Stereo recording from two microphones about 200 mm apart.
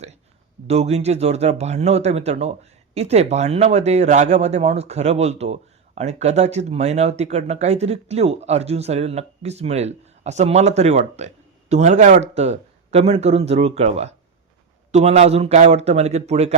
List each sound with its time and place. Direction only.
0.7 s a man's voice: 30° right (ahead or behind)